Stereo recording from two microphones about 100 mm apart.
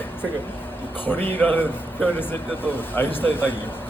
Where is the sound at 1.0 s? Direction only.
20° left (ahead or behind).